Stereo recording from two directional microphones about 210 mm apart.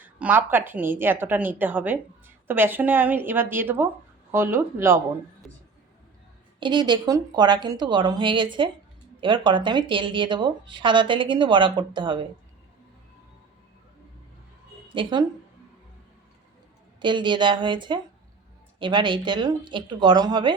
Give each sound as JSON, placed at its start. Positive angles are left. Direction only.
{"t": 0.0, "sound": "a woman's voice", "side_deg": -10}
{"t": 6.6, "sound": "speech", "side_deg": -20}
{"t": 14.9, "sound": "speech", "side_deg": -20}
{"t": 17.0, "sound": "speech", "side_deg": -20}